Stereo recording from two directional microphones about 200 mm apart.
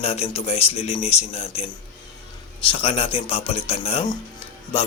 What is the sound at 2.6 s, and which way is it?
Speech, 25° left (ahead or behind).